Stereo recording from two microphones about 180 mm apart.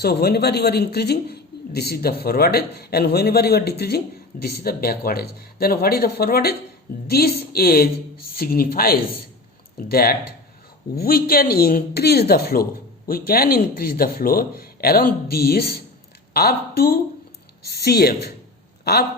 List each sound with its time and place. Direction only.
0.0 s a man's voice: 60° left (ahead or behind)